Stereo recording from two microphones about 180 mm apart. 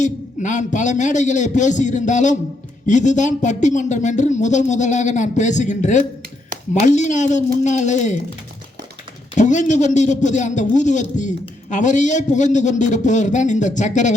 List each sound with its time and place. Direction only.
0.0 s a man's voice: 45° left (ahead or behind)
9.3 s a man's voice: 40° left (ahead or behind)